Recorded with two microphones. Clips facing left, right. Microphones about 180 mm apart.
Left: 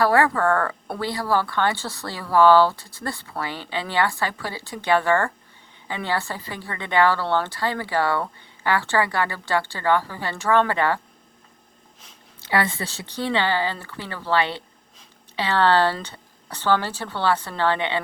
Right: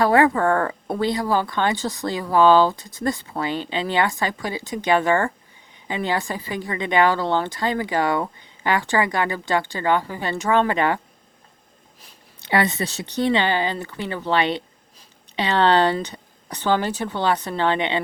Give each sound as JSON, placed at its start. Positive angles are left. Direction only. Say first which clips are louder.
{"t": 0.0, "sound": "speech", "louder": "right 2 dB", "side_deg": -20}
{"t": 12.4, "sound": "speech", "louder": "right 3 dB", "side_deg": -20}